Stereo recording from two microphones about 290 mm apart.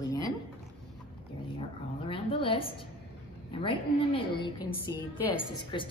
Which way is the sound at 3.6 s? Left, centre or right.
Centre.